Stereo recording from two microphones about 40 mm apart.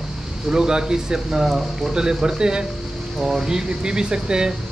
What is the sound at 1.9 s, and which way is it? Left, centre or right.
Speech, centre.